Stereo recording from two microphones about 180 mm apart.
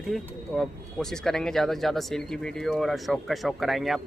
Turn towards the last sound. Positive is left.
turn(degrees=0)  # may be behind; listen again after turning